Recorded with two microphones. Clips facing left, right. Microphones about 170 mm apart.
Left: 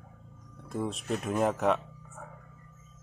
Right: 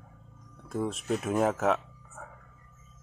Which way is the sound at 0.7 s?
Centre (ahead or behind).